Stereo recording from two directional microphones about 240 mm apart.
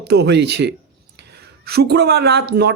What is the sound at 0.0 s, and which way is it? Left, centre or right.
A woman's voice, right.